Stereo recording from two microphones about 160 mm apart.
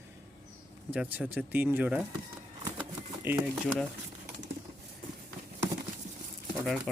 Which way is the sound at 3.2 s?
10° right (ahead or behind).